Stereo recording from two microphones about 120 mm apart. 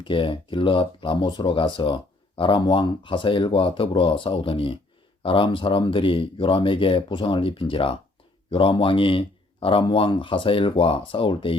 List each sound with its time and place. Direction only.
0.0 s speech: 45° left (ahead or behind)